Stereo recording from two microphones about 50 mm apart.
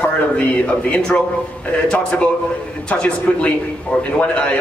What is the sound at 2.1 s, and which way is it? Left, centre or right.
Speech, left.